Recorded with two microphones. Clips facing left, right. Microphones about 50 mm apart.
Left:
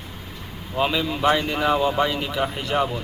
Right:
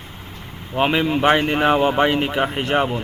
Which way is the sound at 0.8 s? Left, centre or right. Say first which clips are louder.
Right 4 dB; right.